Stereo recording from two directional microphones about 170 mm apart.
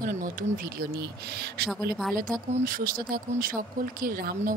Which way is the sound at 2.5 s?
55° right (ahead or behind).